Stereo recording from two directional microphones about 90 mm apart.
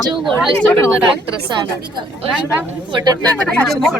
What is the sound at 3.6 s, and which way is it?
Speech, centre (ahead or behind).